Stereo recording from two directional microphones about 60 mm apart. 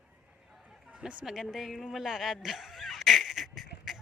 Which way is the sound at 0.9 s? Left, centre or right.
Centre.